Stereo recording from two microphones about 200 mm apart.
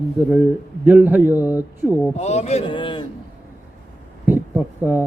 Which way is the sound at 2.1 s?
35° left (ahead or behind).